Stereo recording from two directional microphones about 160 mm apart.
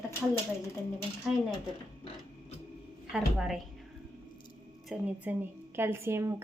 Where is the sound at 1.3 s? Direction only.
5° right (ahead or behind).